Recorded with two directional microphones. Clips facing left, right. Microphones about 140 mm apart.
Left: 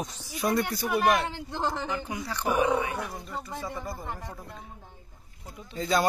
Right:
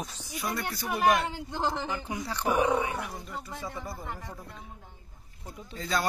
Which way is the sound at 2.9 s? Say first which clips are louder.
Left 2 dB; centre (ahead or behind).